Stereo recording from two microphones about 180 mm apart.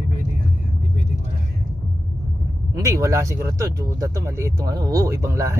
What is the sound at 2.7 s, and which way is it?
Speech, 15° right (ahead or behind).